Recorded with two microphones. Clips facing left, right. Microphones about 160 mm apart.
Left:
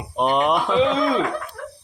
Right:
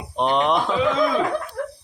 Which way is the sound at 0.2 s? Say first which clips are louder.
Left 1 dB; 5° left (ahead or behind).